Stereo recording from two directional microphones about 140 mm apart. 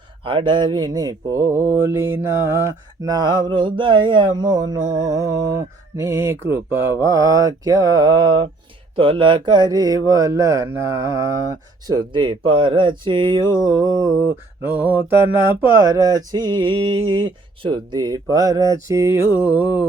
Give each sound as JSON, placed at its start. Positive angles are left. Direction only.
{"t": 0.3, "sound": "music", "side_deg": -35}
{"t": 11.9, "sound": "speech", "side_deg": -35}
{"t": 13.7, "sound": "music", "side_deg": -25}
{"t": 14.6, "sound": "mantra", "side_deg": -15}
{"t": 15.6, "sound": "music", "side_deg": -20}